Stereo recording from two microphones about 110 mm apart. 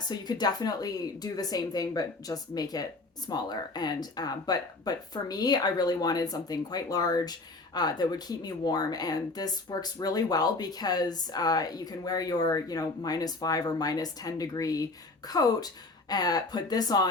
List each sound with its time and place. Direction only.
0.1 s speech: 40° left (ahead or behind)